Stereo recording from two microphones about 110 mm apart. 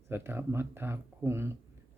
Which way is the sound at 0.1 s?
20° right (ahead or behind).